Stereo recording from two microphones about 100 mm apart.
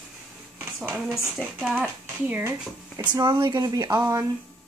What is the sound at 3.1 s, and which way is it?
Speech, 40° right (ahead or behind).